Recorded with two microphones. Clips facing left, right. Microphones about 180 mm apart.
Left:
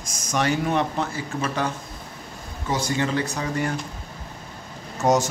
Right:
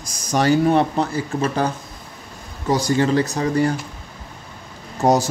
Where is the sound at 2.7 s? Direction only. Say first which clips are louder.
Right 6 dB; 35° right (ahead or behind).